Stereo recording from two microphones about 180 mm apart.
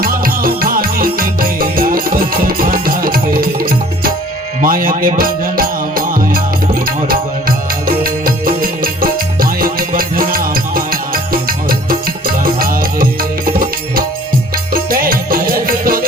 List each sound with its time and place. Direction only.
0.0 s music: 55° right (ahead or behind)